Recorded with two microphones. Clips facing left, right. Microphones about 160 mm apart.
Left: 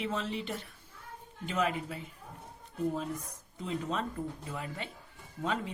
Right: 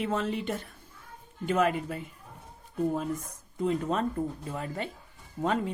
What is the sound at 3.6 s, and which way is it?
Speech, 50° right (ahead or behind).